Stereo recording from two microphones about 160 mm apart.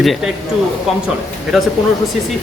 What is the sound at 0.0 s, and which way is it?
Speech, centre (ahead or behind).